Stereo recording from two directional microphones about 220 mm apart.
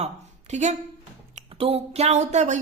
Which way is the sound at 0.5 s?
30° right (ahead or behind).